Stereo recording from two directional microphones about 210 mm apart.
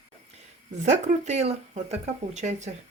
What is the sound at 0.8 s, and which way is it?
Speech, 35° right (ahead or behind).